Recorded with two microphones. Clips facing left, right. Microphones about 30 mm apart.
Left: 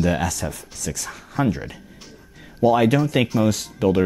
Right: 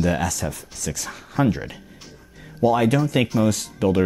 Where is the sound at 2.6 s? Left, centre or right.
Centre.